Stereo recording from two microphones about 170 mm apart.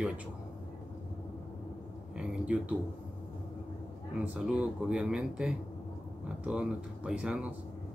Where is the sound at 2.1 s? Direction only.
5° right (ahead or behind).